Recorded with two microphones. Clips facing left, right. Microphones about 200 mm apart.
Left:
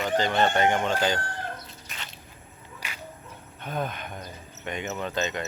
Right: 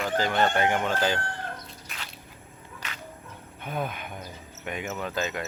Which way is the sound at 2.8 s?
10° left (ahead or behind).